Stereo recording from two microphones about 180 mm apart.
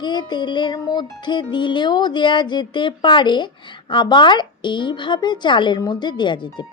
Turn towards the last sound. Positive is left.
turn(degrees=25)  # may be behind; listen again after turning